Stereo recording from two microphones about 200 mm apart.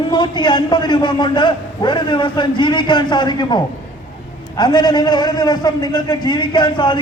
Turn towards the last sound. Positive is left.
turn(degrees=25)  # may be behind; listen again after turning